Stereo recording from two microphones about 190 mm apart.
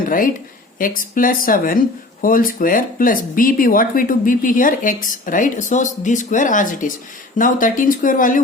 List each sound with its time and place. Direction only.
0.8 s speech: 45° left (ahead or behind)